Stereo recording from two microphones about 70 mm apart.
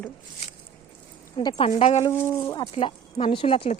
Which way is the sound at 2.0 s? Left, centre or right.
Left.